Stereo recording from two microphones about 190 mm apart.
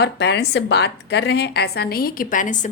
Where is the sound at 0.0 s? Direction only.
60° left (ahead or behind).